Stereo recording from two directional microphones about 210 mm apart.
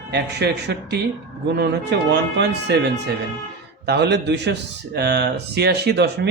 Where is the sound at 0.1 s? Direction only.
55° right (ahead or behind).